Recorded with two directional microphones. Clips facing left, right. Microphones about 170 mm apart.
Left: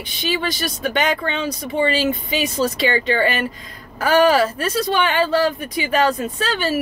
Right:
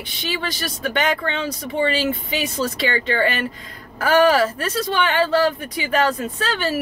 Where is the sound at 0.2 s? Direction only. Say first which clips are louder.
Left 4 dB; 15° left (ahead or behind).